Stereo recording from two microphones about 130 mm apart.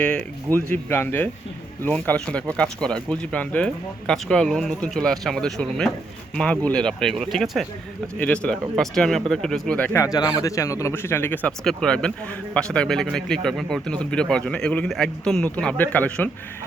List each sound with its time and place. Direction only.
0.0 s speech: 10° left (ahead or behind)
10.0 s speech: 30° left (ahead or behind)
11.6 s speech: 5° left (ahead or behind)